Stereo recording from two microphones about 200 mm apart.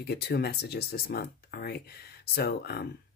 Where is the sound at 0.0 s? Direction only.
55° left (ahead or behind).